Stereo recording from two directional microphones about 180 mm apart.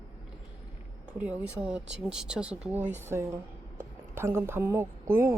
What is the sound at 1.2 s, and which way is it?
Speech, 5° right (ahead or behind).